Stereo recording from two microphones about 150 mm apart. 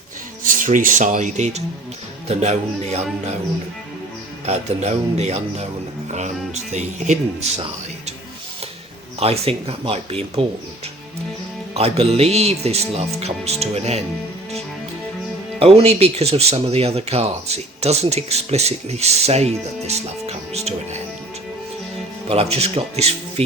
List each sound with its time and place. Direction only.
0.4 s speech: 60° right (ahead or behind)
4.4 s speech: 45° right (ahead or behind)
9.2 s speech: 40° right (ahead or behind)
11.7 s speech: 40° right (ahead or behind)
15.5 s speech: 40° right (ahead or behind)
22.3 s speech: 45° right (ahead or behind)